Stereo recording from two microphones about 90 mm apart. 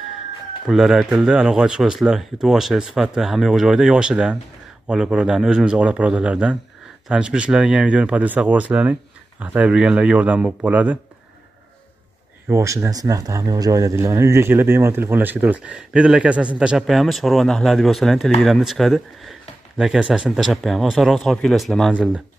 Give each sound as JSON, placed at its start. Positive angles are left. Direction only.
{"t": 0.7, "sound": "speech", "side_deg": -5}
{"t": 12.4, "sound": "speech", "side_deg": -35}